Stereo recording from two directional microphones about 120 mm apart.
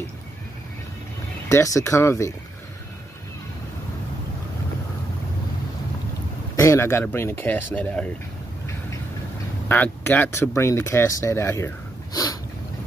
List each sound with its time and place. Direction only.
1.5 s speech: 25° left (ahead or behind)
6.5 s speech: 25° left (ahead or behind); by 8.1 s 10° left (ahead or behind)
9.7 s speech: 15° left (ahead or behind); by 12.4 s 35° left (ahead or behind)